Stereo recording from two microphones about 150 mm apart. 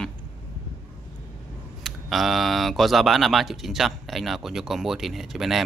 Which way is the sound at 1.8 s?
Centre (ahead or behind).